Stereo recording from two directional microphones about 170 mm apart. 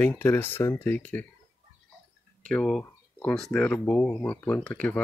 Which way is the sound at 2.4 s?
5° left (ahead or behind).